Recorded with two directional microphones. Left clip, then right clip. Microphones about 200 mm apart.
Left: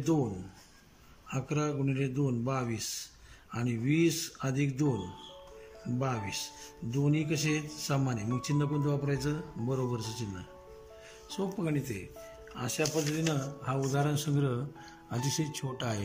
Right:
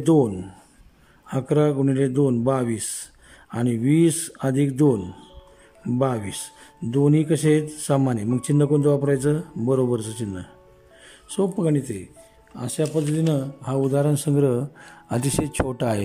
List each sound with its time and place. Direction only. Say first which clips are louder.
1.6 s speech: right 13 dB; 40° right (ahead or behind)